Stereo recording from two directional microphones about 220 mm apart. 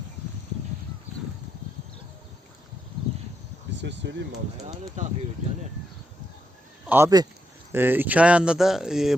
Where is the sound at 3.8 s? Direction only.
55° right (ahead or behind).